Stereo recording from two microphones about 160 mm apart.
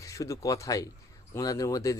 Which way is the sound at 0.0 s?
20° left (ahead or behind).